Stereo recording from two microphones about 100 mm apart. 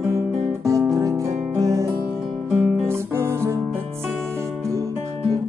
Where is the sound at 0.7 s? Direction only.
35° right (ahead or behind).